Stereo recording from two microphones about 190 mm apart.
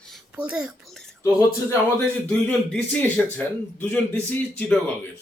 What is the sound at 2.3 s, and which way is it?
Speech, 5° left (ahead or behind).